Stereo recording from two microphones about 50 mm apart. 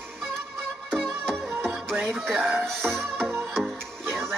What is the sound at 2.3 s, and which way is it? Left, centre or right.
Speech, right.